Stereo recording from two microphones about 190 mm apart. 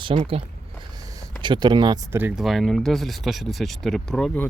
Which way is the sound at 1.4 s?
25° right (ahead or behind).